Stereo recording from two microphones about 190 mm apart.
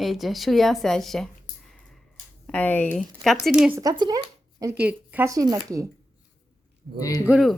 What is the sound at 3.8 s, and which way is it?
Speech, 20° right (ahead or behind).